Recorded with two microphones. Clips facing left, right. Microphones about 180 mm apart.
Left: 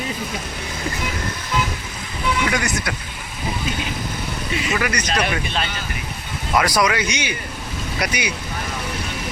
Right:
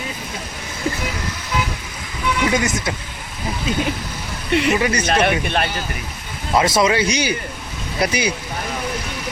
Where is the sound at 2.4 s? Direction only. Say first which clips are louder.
Right 7 dB; 20° right (ahead or behind).